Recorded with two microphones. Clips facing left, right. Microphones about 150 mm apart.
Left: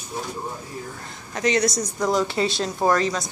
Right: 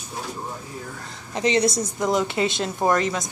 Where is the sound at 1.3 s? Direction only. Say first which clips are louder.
Right 1 dB; 25° right (ahead or behind).